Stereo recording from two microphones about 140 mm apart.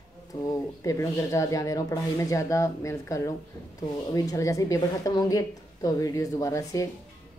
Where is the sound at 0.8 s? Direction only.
20° left (ahead or behind).